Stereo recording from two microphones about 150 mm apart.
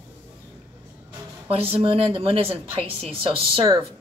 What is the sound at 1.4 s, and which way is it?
A woman's voice, 40° right (ahead or behind).